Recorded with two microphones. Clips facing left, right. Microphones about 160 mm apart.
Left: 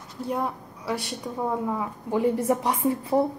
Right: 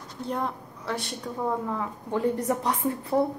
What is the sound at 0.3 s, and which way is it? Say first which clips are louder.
A woman's voice: left 2 dB; 10° left (ahead or behind).